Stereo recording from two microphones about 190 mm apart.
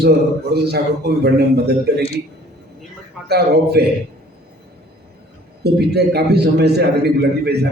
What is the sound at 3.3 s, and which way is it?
Speech, 55° right (ahead or behind).